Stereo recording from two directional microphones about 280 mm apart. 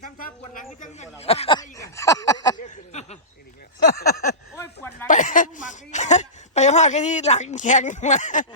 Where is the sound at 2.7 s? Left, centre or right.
Left.